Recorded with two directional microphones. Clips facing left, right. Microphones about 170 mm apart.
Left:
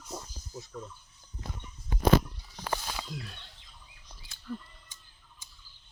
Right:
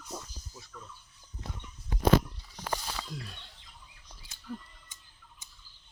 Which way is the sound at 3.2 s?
Centre (ahead or behind).